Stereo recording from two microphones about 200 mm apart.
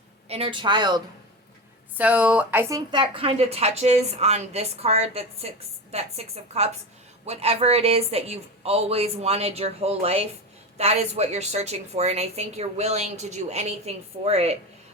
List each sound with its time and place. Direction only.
0.3 s speech: 30° right (ahead or behind)
2.0 s speech: 10° right (ahead or behind); by 14.5 s 30° right (ahead or behind)